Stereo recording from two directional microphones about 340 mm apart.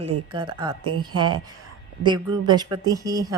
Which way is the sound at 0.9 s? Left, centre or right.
Right.